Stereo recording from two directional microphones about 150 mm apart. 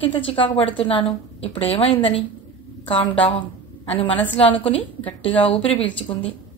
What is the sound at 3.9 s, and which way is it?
A woman's voice, 40° left (ahead or behind).